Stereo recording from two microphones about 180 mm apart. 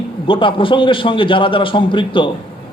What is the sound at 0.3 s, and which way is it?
A man's voice, 30° left (ahead or behind).